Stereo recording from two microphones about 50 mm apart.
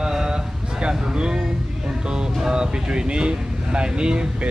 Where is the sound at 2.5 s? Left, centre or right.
Centre.